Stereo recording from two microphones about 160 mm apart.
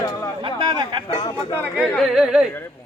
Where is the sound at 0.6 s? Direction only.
30° right (ahead or behind).